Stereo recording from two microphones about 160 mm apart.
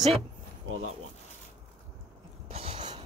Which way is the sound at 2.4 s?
35° right (ahead or behind).